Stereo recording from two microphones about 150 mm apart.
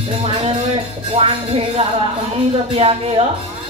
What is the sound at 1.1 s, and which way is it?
Music, 40° right (ahead or behind).